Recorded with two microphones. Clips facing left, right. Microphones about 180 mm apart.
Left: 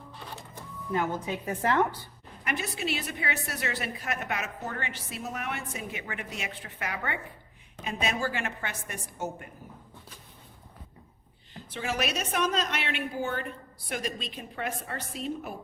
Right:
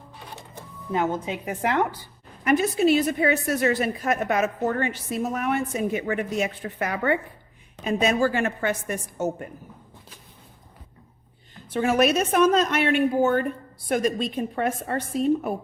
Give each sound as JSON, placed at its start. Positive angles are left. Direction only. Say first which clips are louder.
{"t": 0.9, "sound": "speech", "louder": "right 4 dB", "side_deg": -20}
{"t": 2.4, "sound": "a woman's voice", "louder": "right 13 dB", "side_deg": -45}
{"t": 11.7, "sound": "a woman's voice", "louder": "right 11 dB", "side_deg": -50}